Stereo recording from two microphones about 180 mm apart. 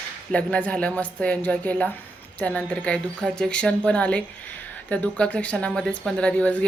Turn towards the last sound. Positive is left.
turn(degrees=5)  # may be behind; listen again after turning